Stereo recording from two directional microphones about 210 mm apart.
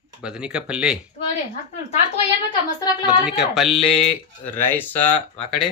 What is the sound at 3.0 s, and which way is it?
Speech, 5° right (ahead or behind).